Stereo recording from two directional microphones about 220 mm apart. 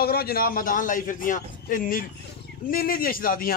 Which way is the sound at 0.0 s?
45° left (ahead or behind).